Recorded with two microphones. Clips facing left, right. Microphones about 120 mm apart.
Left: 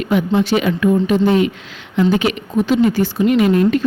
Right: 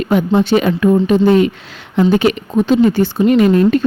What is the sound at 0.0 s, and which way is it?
Speech, 40° right (ahead or behind).